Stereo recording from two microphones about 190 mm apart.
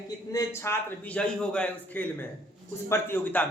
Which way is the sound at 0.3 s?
15° left (ahead or behind).